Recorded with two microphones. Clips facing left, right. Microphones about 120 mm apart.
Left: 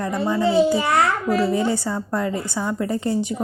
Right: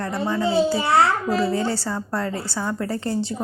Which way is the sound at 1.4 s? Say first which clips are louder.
Left 2 dB; 15° left (ahead or behind).